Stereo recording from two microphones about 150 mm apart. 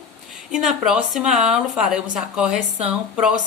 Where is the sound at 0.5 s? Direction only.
5° right (ahead or behind).